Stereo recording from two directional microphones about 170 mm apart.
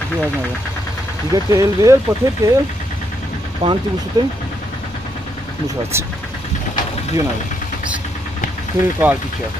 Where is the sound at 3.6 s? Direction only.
35° right (ahead or behind).